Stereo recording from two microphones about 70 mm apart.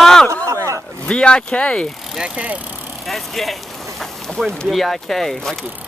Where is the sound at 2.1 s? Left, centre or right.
Centre.